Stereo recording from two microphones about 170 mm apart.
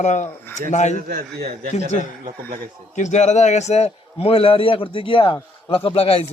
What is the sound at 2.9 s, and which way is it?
A man's voice, 45° left (ahead or behind).